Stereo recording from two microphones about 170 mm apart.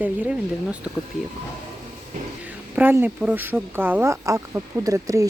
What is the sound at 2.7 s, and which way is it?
Speech, 10° right (ahead or behind).